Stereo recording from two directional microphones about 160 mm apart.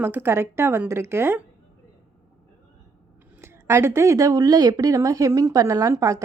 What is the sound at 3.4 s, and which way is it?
Speech, 15° right (ahead or behind).